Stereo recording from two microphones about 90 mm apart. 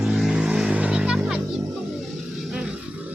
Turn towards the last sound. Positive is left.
turn(degrees=-10)  # may be behind; listen again after turning